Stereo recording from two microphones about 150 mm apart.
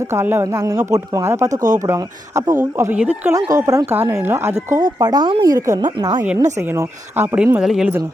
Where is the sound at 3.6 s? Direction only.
20° right (ahead or behind).